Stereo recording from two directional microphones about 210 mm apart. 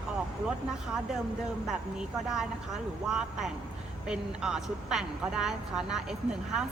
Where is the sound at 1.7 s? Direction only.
Centre (ahead or behind).